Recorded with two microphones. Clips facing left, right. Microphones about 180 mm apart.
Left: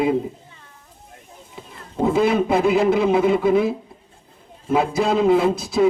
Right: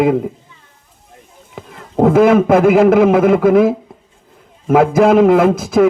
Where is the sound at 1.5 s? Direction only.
70° right (ahead or behind); by 3.7 s 90° right.